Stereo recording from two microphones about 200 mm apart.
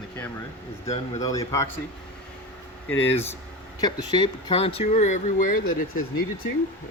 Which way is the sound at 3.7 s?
20° left (ahead or behind).